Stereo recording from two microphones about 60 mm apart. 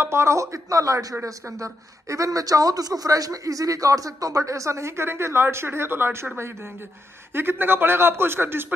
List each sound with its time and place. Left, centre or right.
0.0 s a man's voice: right